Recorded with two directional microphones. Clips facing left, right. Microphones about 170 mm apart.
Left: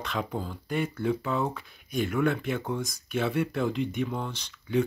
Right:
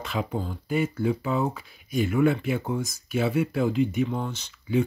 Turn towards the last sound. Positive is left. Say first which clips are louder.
# right 2 dB
turn(degrees=-5)  # may be behind; listen again after turning